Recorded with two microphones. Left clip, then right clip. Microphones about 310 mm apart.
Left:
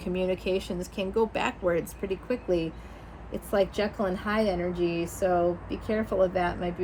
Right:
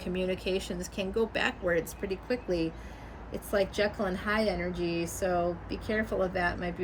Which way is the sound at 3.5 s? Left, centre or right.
Centre.